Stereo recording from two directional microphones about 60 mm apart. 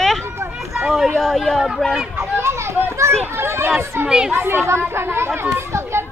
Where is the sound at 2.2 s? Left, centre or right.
Right.